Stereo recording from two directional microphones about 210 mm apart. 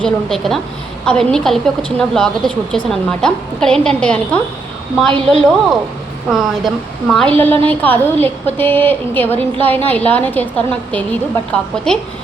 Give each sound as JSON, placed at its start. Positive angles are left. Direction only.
{"t": 0.0, "sound": "a woman's voice", "side_deg": 0}
{"t": 5.1, "sound": "speech", "side_deg": -25}
{"t": 6.2, "sound": "a woman's voice", "side_deg": 0}